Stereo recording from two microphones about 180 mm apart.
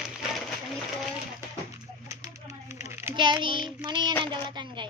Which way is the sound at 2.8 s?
15° right (ahead or behind).